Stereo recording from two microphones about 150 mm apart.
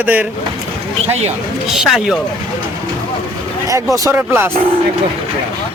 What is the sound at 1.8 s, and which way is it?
Speech, 5° right (ahead or behind).